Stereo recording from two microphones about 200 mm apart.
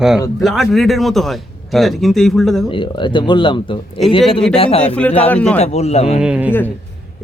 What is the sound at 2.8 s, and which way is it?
Speech, 25° left (ahead or behind).